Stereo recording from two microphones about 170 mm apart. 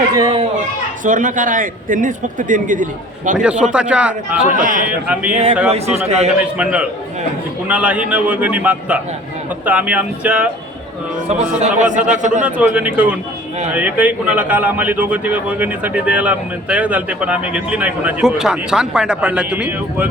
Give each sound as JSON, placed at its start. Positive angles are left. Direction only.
{"t": 0.1, "sound": "speech", "side_deg": -25}
{"t": 1.0, "sound": "speech", "side_deg": -50}
{"t": 3.4, "sound": "a man's voice", "side_deg": -5}
{"t": 4.5, "sound": "speech", "side_deg": -50}
{"t": 4.9, "sound": "a man's voice", "side_deg": -5}
{"t": 5.3, "sound": "a man's voice", "side_deg": -40}
{"t": 6.6, "sound": "a man's voice", "side_deg": -5}
{"t": 11.3, "sound": "speech", "side_deg": -45}
{"t": 12.5, "sound": "a man's voice", "side_deg": -10}